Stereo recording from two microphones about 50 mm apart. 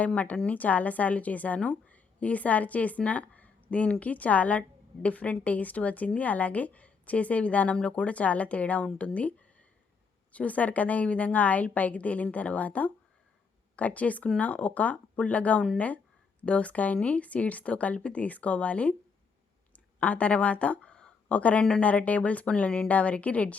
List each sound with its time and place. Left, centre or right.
0.1 s a woman's voice: left
10.3 s a woman's voice: left
19.7 s a sound: left
21.8 s speech: left